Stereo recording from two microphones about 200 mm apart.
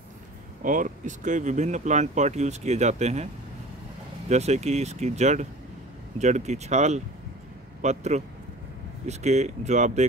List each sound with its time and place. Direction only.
0.6 s speech: 40° right (ahead or behind)
4.3 s speech: 35° right (ahead or behind)